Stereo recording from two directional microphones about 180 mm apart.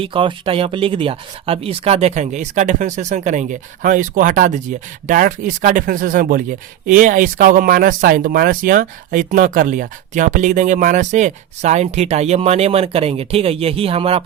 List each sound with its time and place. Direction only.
0.0 s speech: 30° right (ahead or behind)